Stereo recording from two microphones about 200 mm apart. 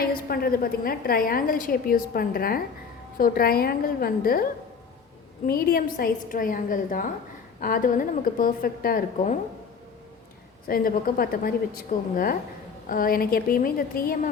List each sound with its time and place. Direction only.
0.0 s a woman's voice: 50° left (ahead or behind)
5.5 s a woman's voice: 50° left (ahead or behind)
10.7 s a woman's voice: 45° left (ahead or behind)